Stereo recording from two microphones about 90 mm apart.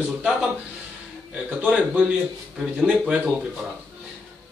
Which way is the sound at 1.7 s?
5° right (ahead or behind).